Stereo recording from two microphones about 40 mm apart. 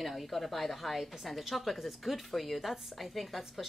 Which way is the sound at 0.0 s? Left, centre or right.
Centre.